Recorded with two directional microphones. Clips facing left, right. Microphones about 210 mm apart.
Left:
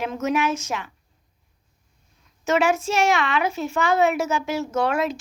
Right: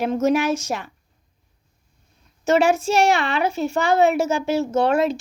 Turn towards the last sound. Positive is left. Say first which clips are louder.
# right 4 dB
turn(degrees=-30)  # may be behind; listen again after turning